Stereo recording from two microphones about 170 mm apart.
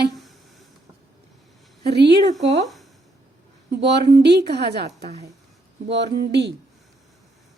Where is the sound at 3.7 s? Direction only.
90° right.